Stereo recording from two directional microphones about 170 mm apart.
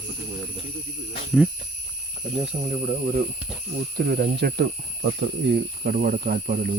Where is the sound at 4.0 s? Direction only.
60° right (ahead or behind).